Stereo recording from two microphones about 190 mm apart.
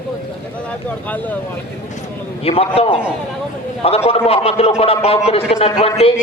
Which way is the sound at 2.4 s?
30° left (ahead or behind).